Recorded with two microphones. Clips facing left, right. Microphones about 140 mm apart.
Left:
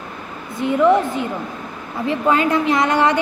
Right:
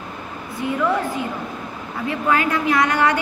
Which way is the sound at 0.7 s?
20° left (ahead or behind).